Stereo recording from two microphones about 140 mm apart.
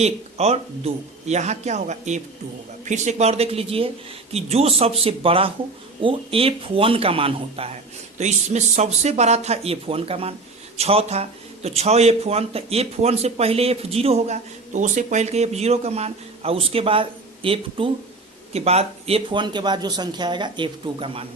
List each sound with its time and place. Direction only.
0.0 s speech: 50° right (ahead or behind)
8.2 s speech: 55° right (ahead or behind)